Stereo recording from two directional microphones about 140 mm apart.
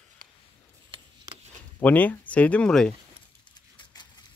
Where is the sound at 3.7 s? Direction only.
35° left (ahead or behind).